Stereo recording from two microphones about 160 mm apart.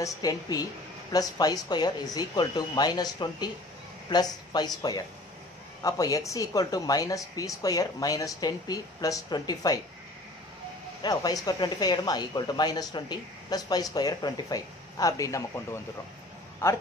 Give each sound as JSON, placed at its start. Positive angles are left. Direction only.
{"t": 0.0, "sound": "speech", "side_deg": 25}
{"t": 11.0, "sound": "speech", "side_deg": 25}